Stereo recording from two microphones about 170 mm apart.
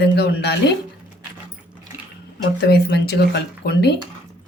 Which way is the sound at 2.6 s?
70° left (ahead or behind).